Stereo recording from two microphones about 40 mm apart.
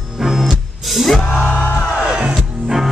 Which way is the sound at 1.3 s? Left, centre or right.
Left.